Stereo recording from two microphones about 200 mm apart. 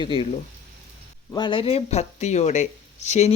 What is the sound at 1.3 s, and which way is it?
Speech, 25° left (ahead or behind).